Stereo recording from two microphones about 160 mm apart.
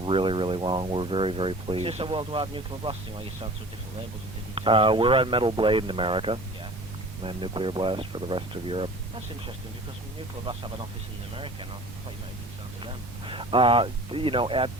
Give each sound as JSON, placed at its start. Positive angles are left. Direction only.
{"t": 0.0, "sound": "speech", "side_deg": -35}
{"t": 4.5, "sound": "speech", "side_deg": -35}
{"t": 10.4, "sound": "speech", "side_deg": -30}
{"t": 12.8, "sound": "speech", "side_deg": -30}